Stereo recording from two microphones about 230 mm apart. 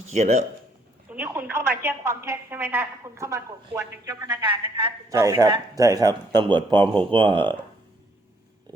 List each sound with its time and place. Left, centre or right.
0.1 s speech: right
1.1 s a sound: centre
1.8 s a woman's voice: centre